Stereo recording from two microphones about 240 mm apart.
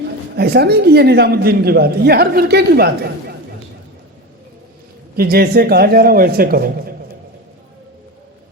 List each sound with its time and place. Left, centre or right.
0.3 s a man's voice: right
5.1 s a man's voice: right